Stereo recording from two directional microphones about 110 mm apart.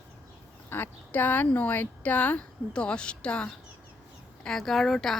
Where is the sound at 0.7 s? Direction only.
15° left (ahead or behind).